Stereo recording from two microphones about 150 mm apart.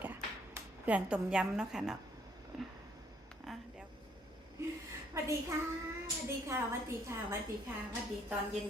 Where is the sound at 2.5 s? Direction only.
Centre (ahead or behind).